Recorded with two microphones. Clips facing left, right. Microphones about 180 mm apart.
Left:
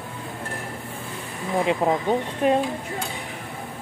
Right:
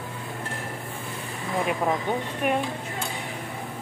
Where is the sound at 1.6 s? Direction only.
25° left (ahead or behind).